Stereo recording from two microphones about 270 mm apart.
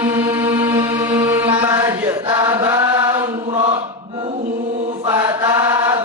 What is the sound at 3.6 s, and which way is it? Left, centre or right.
Chant, centre.